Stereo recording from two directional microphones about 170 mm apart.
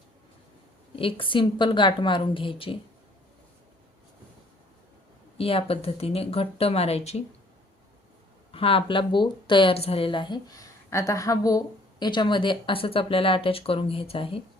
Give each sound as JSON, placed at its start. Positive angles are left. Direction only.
{"t": 0.9, "sound": "a woman's voice", "side_deg": 30}
{"t": 5.4, "sound": "speech", "side_deg": 35}
{"t": 8.5, "sound": "a woman's voice", "side_deg": 35}